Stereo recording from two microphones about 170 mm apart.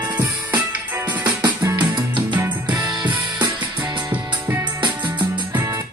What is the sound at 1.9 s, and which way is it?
Music, 30° right (ahead or behind).